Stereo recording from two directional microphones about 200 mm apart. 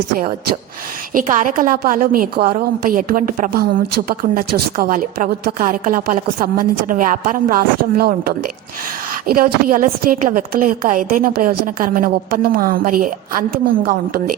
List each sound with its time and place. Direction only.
1.4 s a woman's voice: 40° right (ahead or behind)